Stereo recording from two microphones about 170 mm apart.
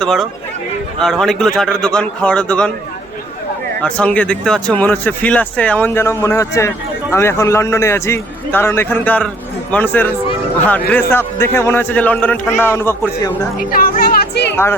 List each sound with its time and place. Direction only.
0.0 s a man's voice: centre (ahead or behind)
3.8 s speech: 5° left (ahead or behind)
11.1 s speech: 15° left (ahead or behind)
13.6 s music: 55° left (ahead or behind); by 14.5 s 70° left (ahead or behind)
14.5 s speech: 15° left (ahead or behind)